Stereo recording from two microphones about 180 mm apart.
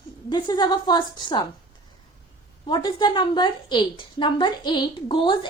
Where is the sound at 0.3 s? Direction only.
25° left (ahead or behind).